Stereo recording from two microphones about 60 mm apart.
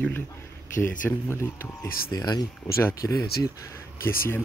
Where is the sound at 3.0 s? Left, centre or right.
Left.